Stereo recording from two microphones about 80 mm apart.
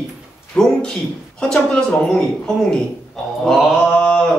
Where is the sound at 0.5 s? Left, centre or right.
Centre.